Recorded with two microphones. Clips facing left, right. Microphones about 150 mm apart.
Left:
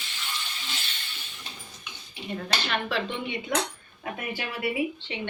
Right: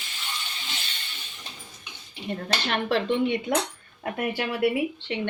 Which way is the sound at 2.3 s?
55° right (ahead or behind).